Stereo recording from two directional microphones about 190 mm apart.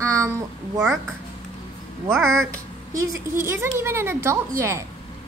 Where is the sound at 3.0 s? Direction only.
15° right (ahead or behind).